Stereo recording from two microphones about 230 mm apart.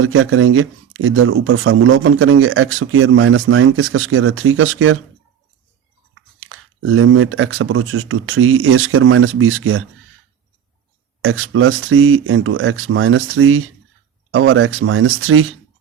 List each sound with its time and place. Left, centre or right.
0.0 s speech: right
6.1 s speech: right
11.2 s speech: right